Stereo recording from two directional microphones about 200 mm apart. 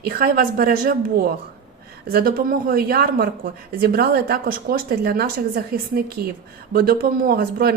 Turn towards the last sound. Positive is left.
turn(degrees=-50)  # may be behind; listen again after turning